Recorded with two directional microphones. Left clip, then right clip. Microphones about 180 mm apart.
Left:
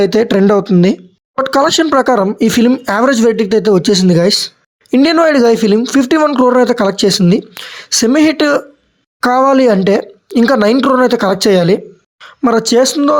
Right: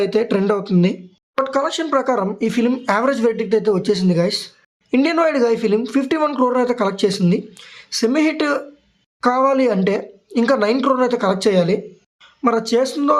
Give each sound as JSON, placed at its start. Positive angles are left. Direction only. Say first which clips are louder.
{"t": 0.0, "sound": "speech", "louder": "left 7 dB", "side_deg": 40}